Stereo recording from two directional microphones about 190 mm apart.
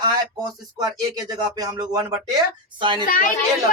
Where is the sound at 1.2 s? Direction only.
20° right (ahead or behind).